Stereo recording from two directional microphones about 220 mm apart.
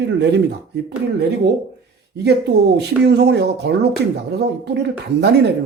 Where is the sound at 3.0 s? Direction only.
50° right (ahead or behind).